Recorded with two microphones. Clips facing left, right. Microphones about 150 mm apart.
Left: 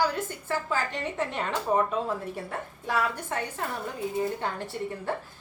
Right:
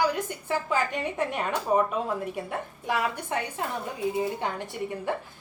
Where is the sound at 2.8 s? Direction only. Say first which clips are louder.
Even; 15° right (ahead or behind).